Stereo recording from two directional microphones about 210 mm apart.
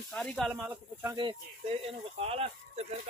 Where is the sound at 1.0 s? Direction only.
20° right (ahead or behind).